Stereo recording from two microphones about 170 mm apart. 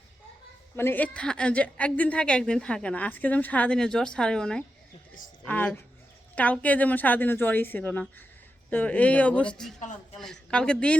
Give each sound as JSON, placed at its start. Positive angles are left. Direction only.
{"t": 0.8, "sound": "a woman's voice", "side_deg": 10}
{"t": 9.8, "sound": "a man's voice", "side_deg": 45}
{"t": 10.2, "sound": "a woman's voice", "side_deg": 5}